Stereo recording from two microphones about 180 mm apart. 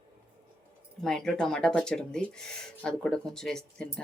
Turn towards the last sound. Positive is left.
turn(degrees=5)  # may be behind; listen again after turning